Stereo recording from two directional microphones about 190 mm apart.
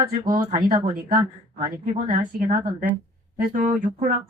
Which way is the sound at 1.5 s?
40° right (ahead or behind).